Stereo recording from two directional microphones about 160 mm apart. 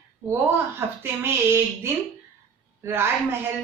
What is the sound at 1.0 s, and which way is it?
A woman's voice, 15° right (ahead or behind).